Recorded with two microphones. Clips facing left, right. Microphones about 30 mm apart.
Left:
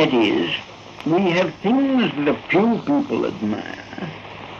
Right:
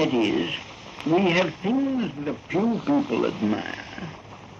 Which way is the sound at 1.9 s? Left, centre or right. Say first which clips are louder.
Left 9 dB; left.